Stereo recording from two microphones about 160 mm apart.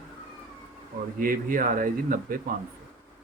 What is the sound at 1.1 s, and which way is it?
Speech, 60° right (ahead or behind).